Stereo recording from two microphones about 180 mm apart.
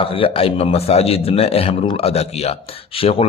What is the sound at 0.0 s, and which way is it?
A man's voice, 30° left (ahead or behind).